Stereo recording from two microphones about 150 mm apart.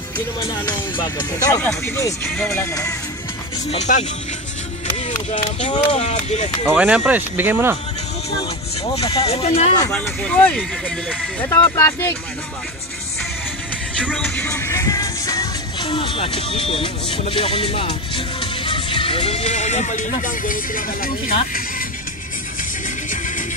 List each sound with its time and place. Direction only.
0.9 s speech: 25° left (ahead or behind)
3.7 s speech: 50° left (ahead or behind)
5.9 s speech: 50° left (ahead or behind)
6.7 s speech: 10° right (ahead or behind)
9.1 s speech: 40° left (ahead or behind)
9.8 s speech: 5° left (ahead or behind)
11.4 s speech: 20° left (ahead or behind)
14.1 s music: 15° left (ahead or behind); by 21.4 s 70° left (ahead or behind)
23.0 s music: 60° left (ahead or behind)